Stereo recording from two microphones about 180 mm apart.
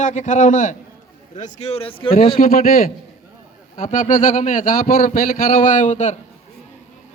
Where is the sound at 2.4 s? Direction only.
50° left (ahead or behind).